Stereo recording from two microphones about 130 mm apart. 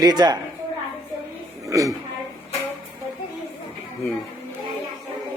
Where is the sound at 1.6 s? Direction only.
25° right (ahead or behind).